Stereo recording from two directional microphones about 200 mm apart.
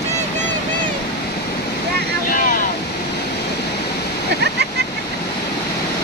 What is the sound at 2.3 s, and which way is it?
Vehicle, 45° left (ahead or behind).